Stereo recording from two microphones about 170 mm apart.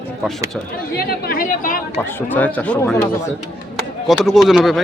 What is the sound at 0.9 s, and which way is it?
Speech, 65° left (ahead or behind).